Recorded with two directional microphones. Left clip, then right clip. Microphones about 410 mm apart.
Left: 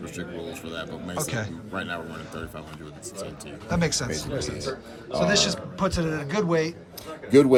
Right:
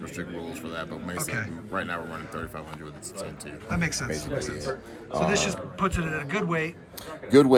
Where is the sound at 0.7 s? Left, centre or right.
Centre.